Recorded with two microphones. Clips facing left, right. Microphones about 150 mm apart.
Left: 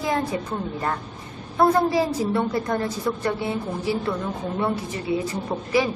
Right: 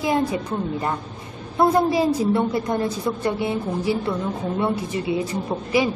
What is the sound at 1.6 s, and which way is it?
A woman's voice, 15° right (ahead or behind).